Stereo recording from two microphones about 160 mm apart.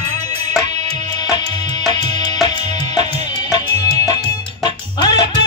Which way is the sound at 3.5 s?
25° left (ahead or behind).